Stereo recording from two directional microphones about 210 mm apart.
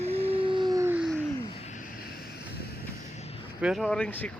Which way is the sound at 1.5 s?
35° left (ahead or behind).